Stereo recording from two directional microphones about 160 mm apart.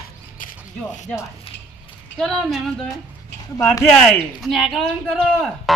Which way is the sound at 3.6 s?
20° left (ahead or behind).